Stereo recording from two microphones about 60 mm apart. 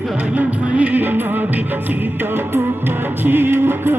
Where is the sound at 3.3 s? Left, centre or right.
Right.